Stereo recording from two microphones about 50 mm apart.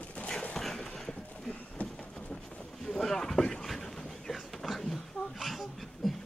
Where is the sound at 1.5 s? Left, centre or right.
Centre.